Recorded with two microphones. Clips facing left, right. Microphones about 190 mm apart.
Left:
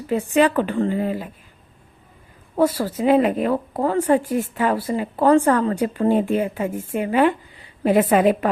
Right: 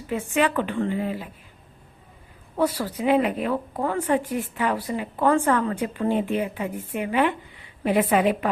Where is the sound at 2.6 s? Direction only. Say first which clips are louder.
Left 5 dB; 40° left (ahead or behind).